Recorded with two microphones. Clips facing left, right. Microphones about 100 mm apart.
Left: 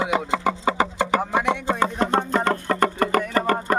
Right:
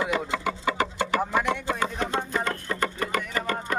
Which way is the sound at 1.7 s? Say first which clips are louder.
Left 6 dB; 35° left (ahead or behind).